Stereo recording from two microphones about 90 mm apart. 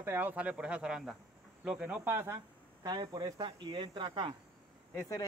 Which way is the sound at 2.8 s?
50° right (ahead or behind).